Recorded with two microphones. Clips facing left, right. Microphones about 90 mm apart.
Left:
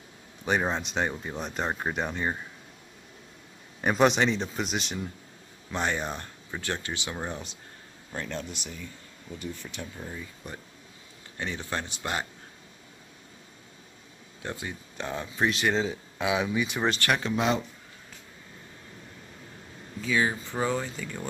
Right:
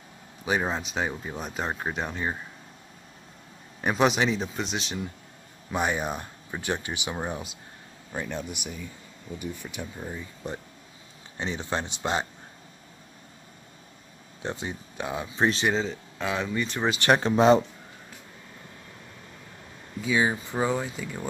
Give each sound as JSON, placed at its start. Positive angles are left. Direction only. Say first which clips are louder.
{"t": 0.5, "sound": "speech", "louder": "even", "side_deg": -5}
{"t": 3.8, "sound": "speech", "louder": "left 1 dB", "side_deg": 0}
{"t": 5.7, "sound": "speech", "louder": "right 2 dB", "side_deg": -10}
{"t": 14.4, "sound": "speech", "louder": "right 3 dB", "side_deg": -20}
{"t": 15.3, "sound": "speech", "louder": "right 2 dB", "side_deg": -25}
{"t": 15.7, "sound": "speech", "louder": "even", "side_deg": 5}
{"t": 17.1, "sound": "speech", "louder": "right 10 dB", "side_deg": -35}
{"t": 20.0, "sound": "speech", "louder": "right 2 dB", "side_deg": -15}